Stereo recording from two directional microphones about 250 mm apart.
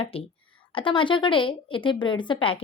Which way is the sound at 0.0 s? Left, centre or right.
Left.